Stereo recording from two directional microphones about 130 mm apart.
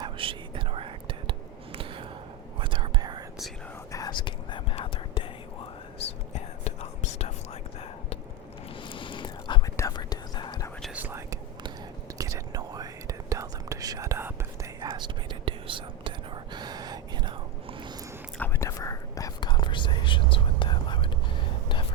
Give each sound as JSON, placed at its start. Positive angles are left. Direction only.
{"t": 0.0, "sound": "whispering", "side_deg": -40}
{"t": 3.9, "sound": "whispering", "side_deg": 35}
{"t": 4.7, "sound": "whispering", "side_deg": 50}
{"t": 6.3, "sound": "whispering", "side_deg": 60}
{"t": 8.9, "sound": "whispering", "side_deg": 40}
{"t": 10.9, "sound": "whispering", "side_deg": -15}
{"t": 12.1, "sound": "whispering", "side_deg": -25}
{"t": 14.8, "sound": "whispering", "side_deg": -30}
{"t": 18.3, "sound": "whispering", "side_deg": 20}